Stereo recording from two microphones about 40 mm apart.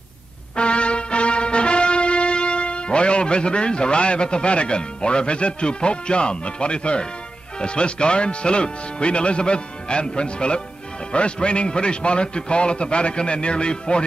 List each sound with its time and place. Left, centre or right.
0.6 s music: left
7.5 s speech: left